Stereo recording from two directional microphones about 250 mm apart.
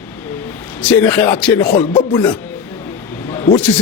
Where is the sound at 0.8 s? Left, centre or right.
Centre.